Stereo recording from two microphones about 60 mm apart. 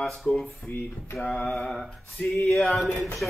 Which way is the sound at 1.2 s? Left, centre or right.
Centre.